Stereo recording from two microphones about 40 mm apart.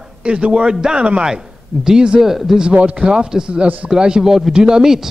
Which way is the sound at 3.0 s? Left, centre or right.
Centre.